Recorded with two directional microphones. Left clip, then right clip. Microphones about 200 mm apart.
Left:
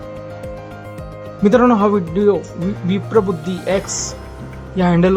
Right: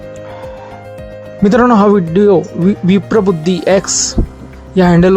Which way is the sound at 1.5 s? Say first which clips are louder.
Right 4 dB; 30° right (ahead or behind).